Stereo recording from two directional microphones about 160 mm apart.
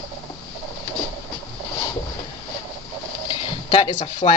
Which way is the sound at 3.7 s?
35° left (ahead or behind).